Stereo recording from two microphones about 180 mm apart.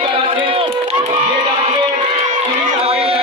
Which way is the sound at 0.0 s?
30° right (ahead or behind).